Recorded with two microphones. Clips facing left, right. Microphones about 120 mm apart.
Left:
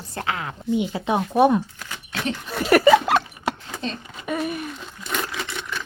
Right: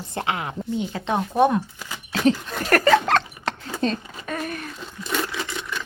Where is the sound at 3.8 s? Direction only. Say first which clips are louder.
Right 7 dB; 45° right (ahead or behind).